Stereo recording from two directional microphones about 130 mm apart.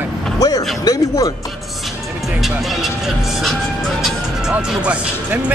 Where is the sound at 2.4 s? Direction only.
Centre (ahead or behind).